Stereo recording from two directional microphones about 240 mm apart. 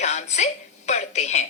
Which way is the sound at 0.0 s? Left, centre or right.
Left.